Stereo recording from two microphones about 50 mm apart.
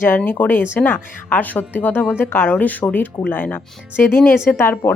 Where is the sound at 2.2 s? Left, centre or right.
Left.